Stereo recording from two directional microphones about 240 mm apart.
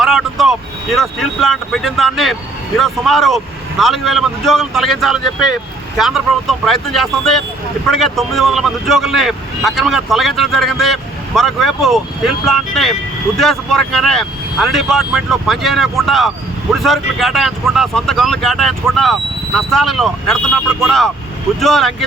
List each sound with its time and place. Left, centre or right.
0.0 s vehicle: centre
0.9 s speech: centre